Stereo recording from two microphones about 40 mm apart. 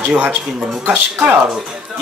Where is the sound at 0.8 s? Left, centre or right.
Right.